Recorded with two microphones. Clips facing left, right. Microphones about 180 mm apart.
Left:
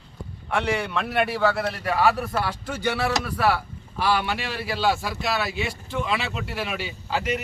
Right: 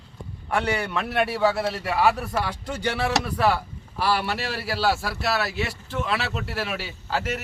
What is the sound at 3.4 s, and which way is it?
A man's voice, centre (ahead or behind).